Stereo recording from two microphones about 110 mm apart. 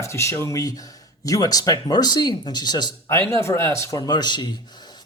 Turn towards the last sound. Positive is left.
turn(degrees=40)  # may be behind; listen again after turning